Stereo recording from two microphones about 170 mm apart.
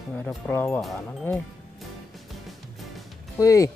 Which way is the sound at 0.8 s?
Centre (ahead or behind).